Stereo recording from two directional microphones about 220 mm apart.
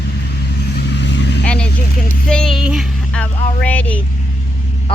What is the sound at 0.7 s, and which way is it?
Vehicle, 50° left (ahead or behind).